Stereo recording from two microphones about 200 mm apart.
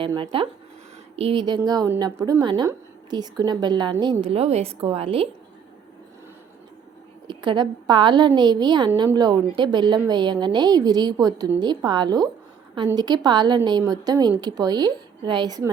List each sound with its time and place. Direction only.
0.0 s a woman's voice: 25° right (ahead or behind)
7.3 s a woman's voice: 25° right (ahead or behind)